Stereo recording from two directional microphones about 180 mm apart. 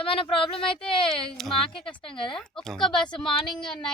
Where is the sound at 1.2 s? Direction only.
5° left (ahead or behind).